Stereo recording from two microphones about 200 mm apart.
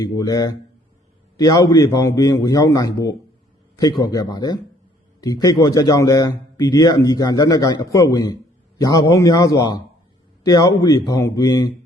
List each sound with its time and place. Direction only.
0.0 s a man's voice: 15° left (ahead or behind)